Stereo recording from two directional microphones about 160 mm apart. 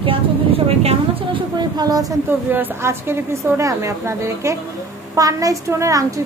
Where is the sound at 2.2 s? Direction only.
15° right (ahead or behind).